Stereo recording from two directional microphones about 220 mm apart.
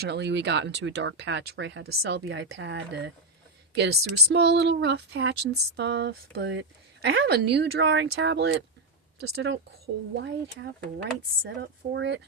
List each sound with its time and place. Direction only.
0.0 s speech: 50° right (ahead or behind)
11.9 s speech: 55° right (ahead or behind)